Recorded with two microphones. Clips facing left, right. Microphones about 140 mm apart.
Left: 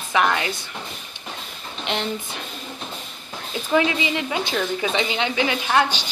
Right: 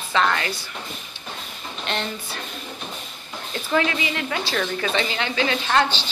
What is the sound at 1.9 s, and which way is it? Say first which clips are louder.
Speech: left 1 dB; 15° left (ahead or behind).